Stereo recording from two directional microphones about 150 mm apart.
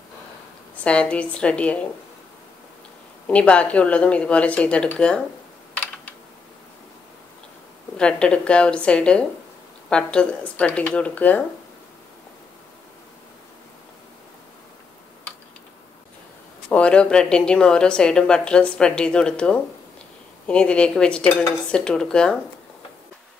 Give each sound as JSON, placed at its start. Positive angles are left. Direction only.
{"t": 0.8, "sound": "speech", "side_deg": 10}
{"t": 3.3, "sound": "speech", "side_deg": 10}
{"t": 8.0, "sound": "speech", "side_deg": 5}
{"t": 16.6, "sound": "speech", "side_deg": 5}